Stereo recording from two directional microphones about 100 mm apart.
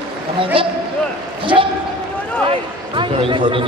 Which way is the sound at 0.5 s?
60° right (ahead or behind).